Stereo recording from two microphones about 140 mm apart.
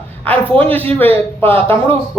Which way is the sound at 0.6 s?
15° left (ahead or behind).